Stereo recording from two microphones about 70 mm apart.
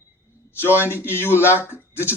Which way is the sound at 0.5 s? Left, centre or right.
Left.